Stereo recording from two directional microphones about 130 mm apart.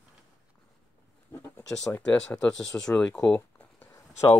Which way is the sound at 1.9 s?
10° left (ahead or behind).